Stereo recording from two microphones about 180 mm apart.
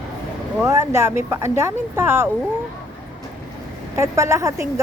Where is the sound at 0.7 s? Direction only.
15° right (ahead or behind).